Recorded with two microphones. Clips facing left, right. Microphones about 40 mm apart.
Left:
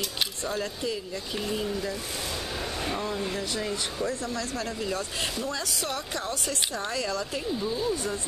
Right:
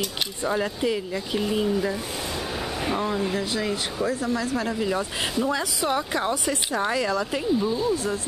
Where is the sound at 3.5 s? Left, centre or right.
Right.